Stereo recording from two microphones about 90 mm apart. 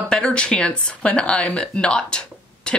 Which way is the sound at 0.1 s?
10° left (ahead or behind).